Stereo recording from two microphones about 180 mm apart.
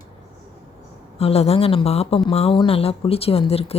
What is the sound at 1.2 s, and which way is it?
A woman's voice, 35° left (ahead or behind).